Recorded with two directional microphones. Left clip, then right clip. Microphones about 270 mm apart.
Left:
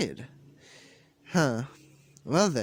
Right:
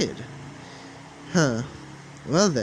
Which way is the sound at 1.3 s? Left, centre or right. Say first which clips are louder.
Right 4 dB; left.